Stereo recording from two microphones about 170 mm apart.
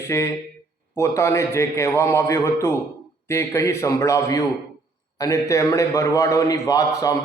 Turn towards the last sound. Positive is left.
turn(degrees=20)  # may be behind; listen again after turning